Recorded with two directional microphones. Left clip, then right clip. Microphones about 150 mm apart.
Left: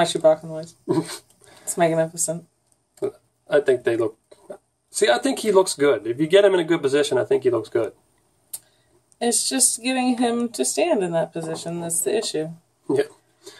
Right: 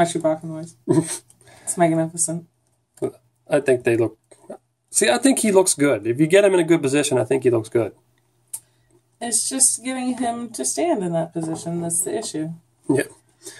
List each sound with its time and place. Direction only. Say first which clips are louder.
0.0 s speech: left 2 dB; 45° left (ahead or behind)
0.8 s speech: right 4 dB; 30° right (ahead or behind)
1.8 s speech: even; 45° left (ahead or behind)
3.0 s speech: even; 35° right (ahead or behind)
9.5 s speech: left 1 dB; 45° left (ahead or behind)
12.8 s a sound: even; 40° right (ahead or behind)